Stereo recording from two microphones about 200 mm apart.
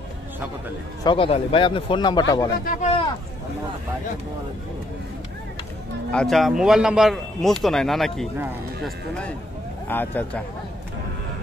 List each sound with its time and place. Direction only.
1.0 s a man's voice: 25° left (ahead or behind)
2.6 s speech: 40° left (ahead or behind)
6.1 s a man's voice: centre (ahead or behind)
9.8 s speech: 10° left (ahead or behind)